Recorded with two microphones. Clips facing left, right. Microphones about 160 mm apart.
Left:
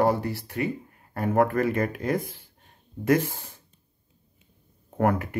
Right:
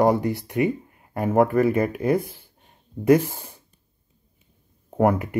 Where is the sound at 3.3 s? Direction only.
50° right (ahead or behind).